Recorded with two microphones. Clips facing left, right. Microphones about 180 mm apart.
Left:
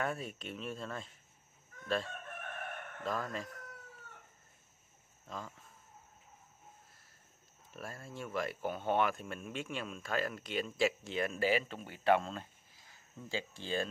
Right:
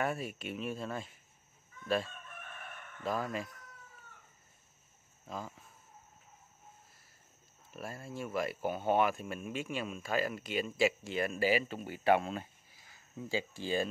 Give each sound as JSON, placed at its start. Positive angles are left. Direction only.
{"t": 0.0, "sound": "speech", "side_deg": -5}
{"t": 2.0, "sound": "crowing", "side_deg": 65}
{"t": 3.0, "sound": "speech", "side_deg": -10}
{"t": 5.2, "sound": "speech", "side_deg": -10}
{"t": 7.7, "sound": "speech", "side_deg": -5}